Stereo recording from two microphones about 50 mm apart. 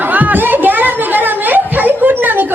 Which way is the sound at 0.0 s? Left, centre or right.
Right.